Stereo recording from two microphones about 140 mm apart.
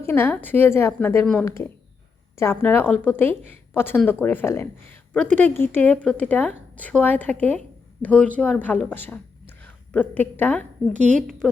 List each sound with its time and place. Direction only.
0.0 s a woman's voice: 15° left (ahead or behind)